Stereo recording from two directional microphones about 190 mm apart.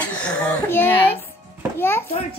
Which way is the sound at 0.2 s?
10° left (ahead or behind).